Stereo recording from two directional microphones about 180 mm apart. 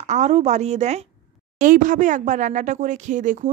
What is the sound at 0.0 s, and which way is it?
Speech, 40° right (ahead or behind).